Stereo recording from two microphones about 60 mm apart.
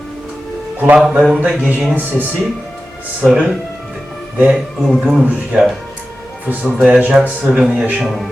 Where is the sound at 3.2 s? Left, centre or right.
Centre.